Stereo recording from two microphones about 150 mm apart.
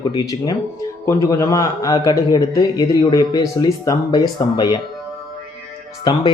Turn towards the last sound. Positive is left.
turn(degrees=30)  # may be behind; listen again after turning